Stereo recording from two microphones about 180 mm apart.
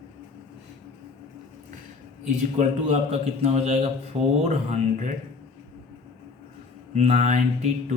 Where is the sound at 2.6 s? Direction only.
35° right (ahead or behind).